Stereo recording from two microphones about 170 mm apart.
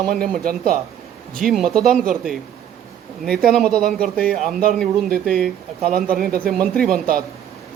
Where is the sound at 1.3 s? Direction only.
Centre (ahead or behind).